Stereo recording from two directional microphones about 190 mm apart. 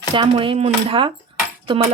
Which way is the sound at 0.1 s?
25° right (ahead or behind).